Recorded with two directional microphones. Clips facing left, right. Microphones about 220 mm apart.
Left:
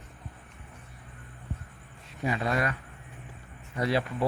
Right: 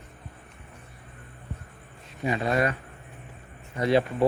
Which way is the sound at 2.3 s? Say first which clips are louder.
Right 4 dB; 25° right (ahead or behind).